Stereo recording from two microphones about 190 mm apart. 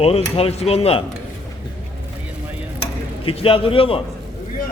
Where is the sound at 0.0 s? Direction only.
30° left (ahead or behind).